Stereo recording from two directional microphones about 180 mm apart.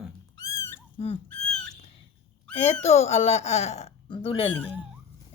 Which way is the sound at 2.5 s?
35° left (ahead or behind).